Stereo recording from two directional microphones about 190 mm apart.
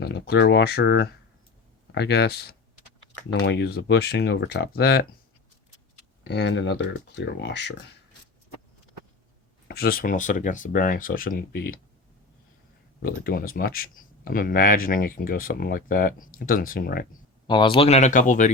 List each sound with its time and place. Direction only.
0.0 s speech: 60° left (ahead or behind)
6.2 s speech: 65° left (ahead or behind)
9.6 s speech: 55° left (ahead or behind)
13.0 s speech: 50° left (ahead or behind)
17.4 s speech: 25° left (ahead or behind); by 18.5 s 40° left (ahead or behind)